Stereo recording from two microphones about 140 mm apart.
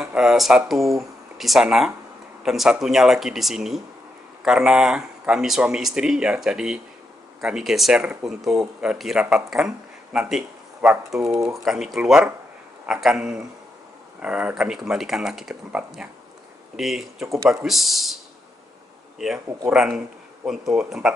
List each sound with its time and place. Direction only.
0.0 s speech: 5° right (ahead or behind)
11.1 s speech: 25° right (ahead or behind)
11.4 s speech: 5° right (ahead or behind)
19.1 s speech: centre (ahead or behind)